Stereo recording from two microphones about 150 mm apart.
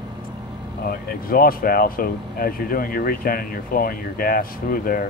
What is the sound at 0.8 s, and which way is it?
Speech, 75° left (ahead or behind).